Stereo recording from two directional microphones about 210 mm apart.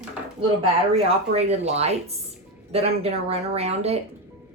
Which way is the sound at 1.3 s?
30° right (ahead or behind).